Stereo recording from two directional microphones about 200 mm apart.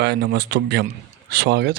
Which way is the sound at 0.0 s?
55° right (ahead or behind).